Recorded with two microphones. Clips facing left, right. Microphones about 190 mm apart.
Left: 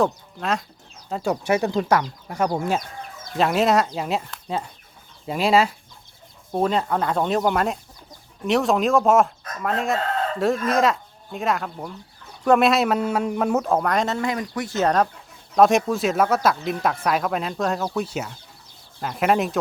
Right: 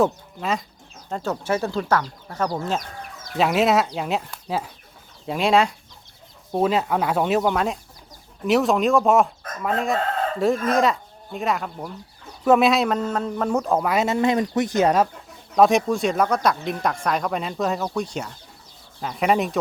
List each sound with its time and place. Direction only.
0.0 s speech: 5° right (ahead or behind)
1.1 s speech: 15° left (ahead or behind)
3.3 s speech: centre (ahead or behind)
14.2 s speech: 25° right (ahead or behind)
15.5 s speech: centre (ahead or behind)